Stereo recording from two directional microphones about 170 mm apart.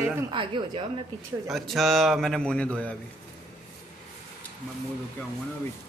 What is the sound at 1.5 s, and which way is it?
A man's voice, centre (ahead or behind).